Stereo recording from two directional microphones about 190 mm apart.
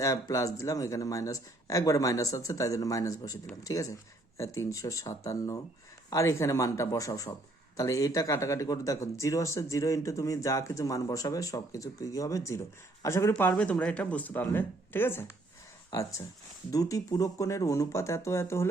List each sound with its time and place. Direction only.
0.0 s speech: 15° left (ahead or behind)